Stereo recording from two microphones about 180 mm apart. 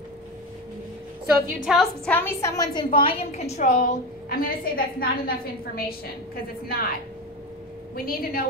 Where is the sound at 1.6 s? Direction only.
Centre (ahead or behind); by 6.9 s 55° left (ahead or behind).